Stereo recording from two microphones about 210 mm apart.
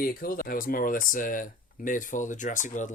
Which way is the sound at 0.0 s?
45° left (ahead or behind).